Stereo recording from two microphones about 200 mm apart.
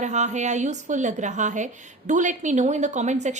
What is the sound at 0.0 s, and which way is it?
A woman's voice, 35° right (ahead or behind).